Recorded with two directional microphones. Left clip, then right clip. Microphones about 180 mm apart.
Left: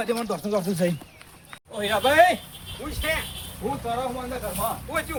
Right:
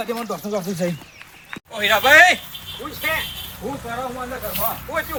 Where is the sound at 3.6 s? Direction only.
10° left (ahead or behind).